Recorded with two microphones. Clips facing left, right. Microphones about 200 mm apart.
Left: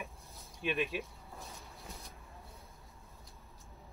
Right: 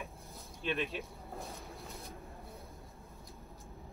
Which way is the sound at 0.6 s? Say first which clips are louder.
Left 1 dB; 15° left (ahead or behind).